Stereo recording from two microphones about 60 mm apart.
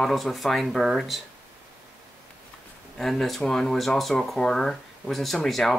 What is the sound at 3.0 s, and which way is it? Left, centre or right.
Speech, centre.